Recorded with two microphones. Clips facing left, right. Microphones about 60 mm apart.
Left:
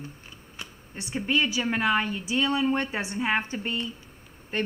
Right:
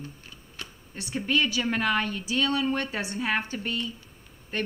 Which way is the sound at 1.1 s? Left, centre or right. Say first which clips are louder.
Even; centre.